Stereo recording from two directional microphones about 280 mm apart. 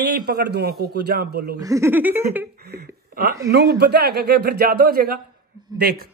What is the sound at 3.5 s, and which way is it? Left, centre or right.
A man's voice, right.